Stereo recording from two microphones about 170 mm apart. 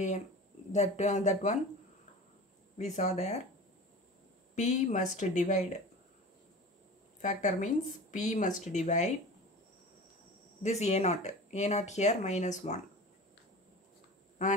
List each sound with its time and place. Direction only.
0.7 s speech: 40° left (ahead or behind)
2.8 s speech: 40° left (ahead or behind)
4.6 s speech: 45° left (ahead or behind)
7.2 s speech: 45° left (ahead or behind)
10.6 s speech: 40° left (ahead or behind)